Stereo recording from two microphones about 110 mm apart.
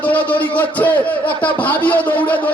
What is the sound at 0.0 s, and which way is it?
A man's voice, 15° left (ahead or behind).